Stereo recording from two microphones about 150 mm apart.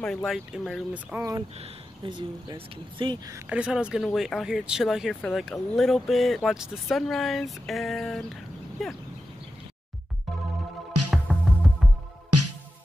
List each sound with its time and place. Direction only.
0.0 s speech: 5° left (ahead or behind)
1.1 s speech: 15° right (ahead or behind)
2.0 s speech: 30° right (ahead or behind)
3.4 s speech: 5° right (ahead or behind)
11.1 s music: centre (ahead or behind)